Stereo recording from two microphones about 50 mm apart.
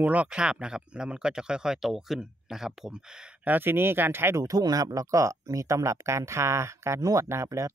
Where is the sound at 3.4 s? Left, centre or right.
Right.